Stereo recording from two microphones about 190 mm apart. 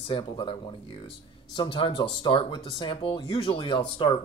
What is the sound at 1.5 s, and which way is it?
Speech, 25° left (ahead or behind).